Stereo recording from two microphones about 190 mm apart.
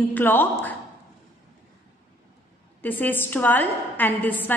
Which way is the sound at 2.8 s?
10° left (ahead or behind).